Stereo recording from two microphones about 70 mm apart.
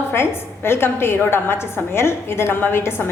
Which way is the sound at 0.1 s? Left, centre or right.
Left.